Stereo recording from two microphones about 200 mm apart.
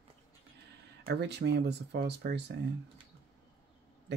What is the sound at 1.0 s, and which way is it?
Speech, 60° right (ahead or behind).